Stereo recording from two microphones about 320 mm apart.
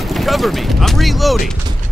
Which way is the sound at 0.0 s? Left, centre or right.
Centre.